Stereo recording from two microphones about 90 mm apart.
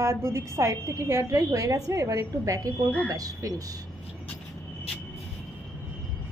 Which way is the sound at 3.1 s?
40° right (ahead or behind).